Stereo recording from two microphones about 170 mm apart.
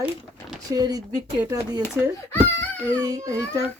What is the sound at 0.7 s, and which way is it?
Speech, 20° right (ahead or behind).